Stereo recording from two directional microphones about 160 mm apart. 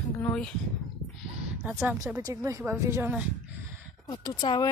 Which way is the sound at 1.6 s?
10° right (ahead or behind).